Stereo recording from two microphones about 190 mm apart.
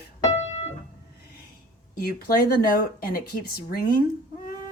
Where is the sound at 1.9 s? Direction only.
50° left (ahead or behind).